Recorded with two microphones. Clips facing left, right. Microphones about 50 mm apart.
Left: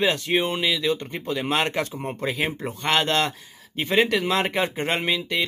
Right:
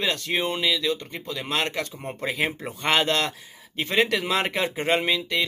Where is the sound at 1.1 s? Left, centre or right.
Left.